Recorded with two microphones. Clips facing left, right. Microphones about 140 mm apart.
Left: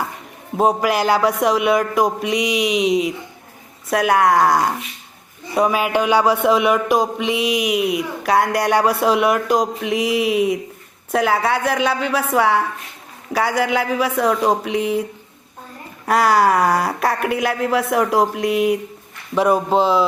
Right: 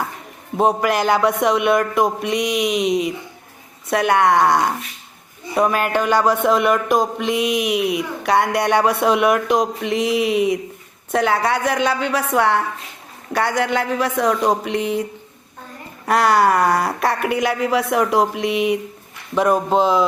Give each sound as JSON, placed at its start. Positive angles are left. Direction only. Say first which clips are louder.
{"t": 0.5, "sound": "speech", "louder": "even", "side_deg": 0}
{"t": 16.0, "sound": "speech", "louder": "even", "side_deg": 0}